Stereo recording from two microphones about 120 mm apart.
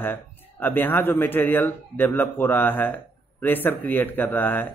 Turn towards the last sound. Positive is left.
turn(degrees=15)  # may be behind; listen again after turning